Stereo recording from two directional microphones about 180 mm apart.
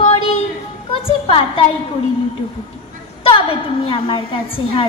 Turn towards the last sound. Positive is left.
turn(degrees=30)  # may be behind; listen again after turning